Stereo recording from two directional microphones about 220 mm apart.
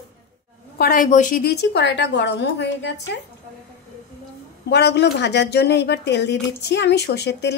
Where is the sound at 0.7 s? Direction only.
40° left (ahead or behind).